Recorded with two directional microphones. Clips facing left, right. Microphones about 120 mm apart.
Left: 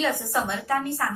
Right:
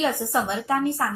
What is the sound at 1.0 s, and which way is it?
Speech, 25° right (ahead or behind).